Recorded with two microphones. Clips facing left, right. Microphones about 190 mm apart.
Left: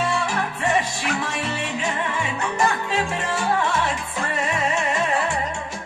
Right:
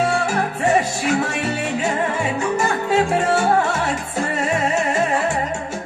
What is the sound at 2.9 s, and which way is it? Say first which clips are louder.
Music: right 8 dB; 45° right (ahead or behind).